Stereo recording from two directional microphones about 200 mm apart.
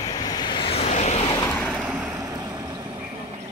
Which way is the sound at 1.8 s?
5° right (ahead or behind).